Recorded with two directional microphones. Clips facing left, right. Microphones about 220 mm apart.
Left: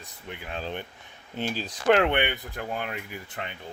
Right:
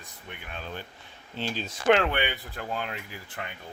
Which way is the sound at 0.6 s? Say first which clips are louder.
Left 4 dB; 25° left (ahead or behind).